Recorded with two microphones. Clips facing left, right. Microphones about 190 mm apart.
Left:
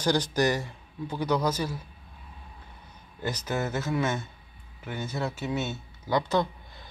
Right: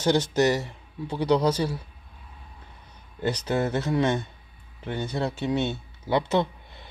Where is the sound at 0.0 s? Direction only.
25° right (ahead or behind).